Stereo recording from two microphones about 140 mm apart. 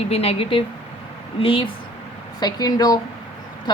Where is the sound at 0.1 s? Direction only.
45° left (ahead or behind).